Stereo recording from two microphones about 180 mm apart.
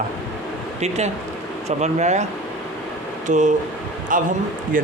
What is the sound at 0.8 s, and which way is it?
Speech, 40° right (ahead or behind).